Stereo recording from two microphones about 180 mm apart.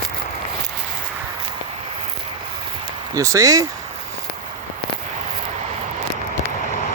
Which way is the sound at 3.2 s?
15° right (ahead or behind).